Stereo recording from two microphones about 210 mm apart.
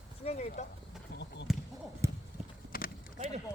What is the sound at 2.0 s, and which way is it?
Clip-clop, 15° right (ahead or behind).